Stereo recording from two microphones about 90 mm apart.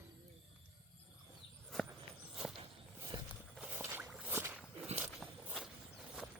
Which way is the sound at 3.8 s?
25° right (ahead or behind).